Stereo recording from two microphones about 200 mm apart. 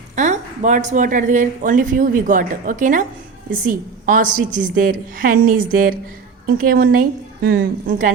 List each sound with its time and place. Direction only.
0.2 s a woman's voice: 35° right (ahead or behind)